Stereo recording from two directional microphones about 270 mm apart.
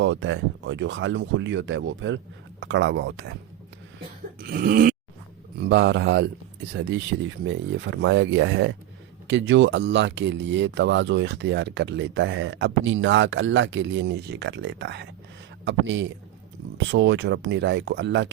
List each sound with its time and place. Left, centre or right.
0.0 s speech: right
4.4 s speech: right